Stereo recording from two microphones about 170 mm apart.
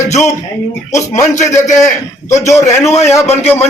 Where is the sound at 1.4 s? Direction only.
45° left (ahead or behind).